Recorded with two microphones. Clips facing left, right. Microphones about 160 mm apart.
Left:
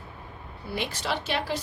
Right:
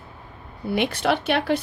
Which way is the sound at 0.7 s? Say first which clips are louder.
Right 8 dB; 60° right (ahead or behind).